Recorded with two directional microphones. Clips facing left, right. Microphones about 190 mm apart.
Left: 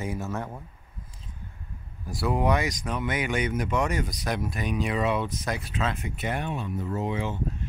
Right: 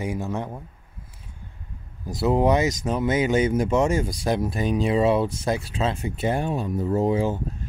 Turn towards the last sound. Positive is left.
turn(degrees=-35)  # may be behind; listen again after turning